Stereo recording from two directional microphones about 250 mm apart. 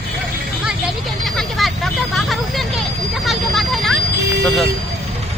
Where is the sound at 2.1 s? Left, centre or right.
Centre.